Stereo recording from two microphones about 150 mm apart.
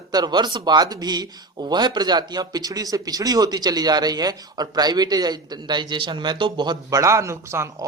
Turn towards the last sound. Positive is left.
turn(degrees=-20)  # may be behind; listen again after turning